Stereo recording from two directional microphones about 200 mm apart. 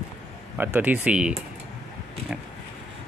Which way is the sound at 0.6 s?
10° right (ahead or behind).